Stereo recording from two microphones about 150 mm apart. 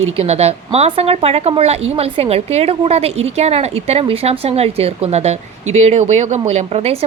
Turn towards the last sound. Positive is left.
turn(degrees=-45)  # may be behind; listen again after turning